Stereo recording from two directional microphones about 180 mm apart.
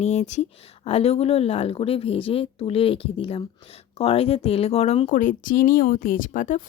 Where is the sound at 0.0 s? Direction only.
40° left (ahead or behind).